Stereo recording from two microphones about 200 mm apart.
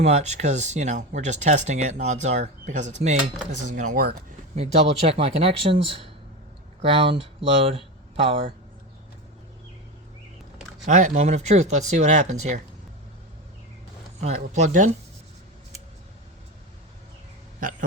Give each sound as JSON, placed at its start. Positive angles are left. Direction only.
{"t": 0.0, "sound": "speech", "side_deg": -35}
{"t": 4.5, "sound": "speech", "side_deg": -30}
{"t": 10.8, "sound": "speech", "side_deg": -35}
{"t": 14.2, "sound": "speech", "side_deg": -35}
{"t": 17.6, "sound": "a sound", "side_deg": -40}